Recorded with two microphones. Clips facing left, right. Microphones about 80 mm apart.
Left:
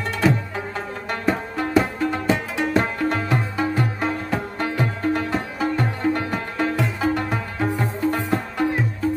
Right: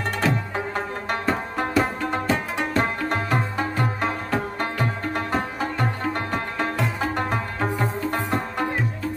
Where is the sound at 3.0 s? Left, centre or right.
Right.